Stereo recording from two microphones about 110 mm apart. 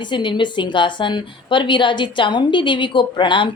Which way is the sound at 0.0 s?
45° left (ahead or behind).